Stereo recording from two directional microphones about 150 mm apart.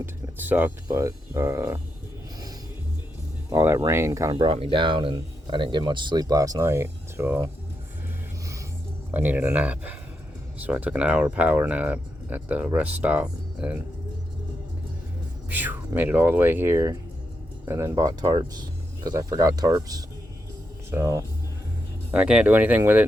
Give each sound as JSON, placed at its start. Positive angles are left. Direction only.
{"t": 0.0, "sound": "speech", "side_deg": -15}
{"t": 3.5, "sound": "speech", "side_deg": -15}
{"t": 4.4, "sound": "speech", "side_deg": -40}
{"t": 9.1, "sound": "speech", "side_deg": -10}
{"t": 15.4, "sound": "speech", "side_deg": -10}
{"t": 22.1, "sound": "speech", "side_deg": -5}